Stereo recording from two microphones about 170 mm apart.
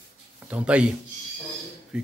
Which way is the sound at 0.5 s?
5° right (ahead or behind).